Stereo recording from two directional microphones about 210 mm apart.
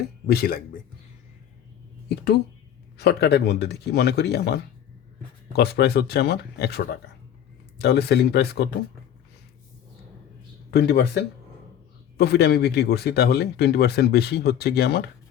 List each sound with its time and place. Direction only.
0.3 s speech: 45° left (ahead or behind)
3.0 s speech: 50° left (ahead or behind)
10.7 s speech: 50° left (ahead or behind)